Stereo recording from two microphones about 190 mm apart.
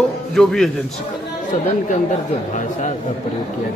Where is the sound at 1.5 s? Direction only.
35° left (ahead or behind).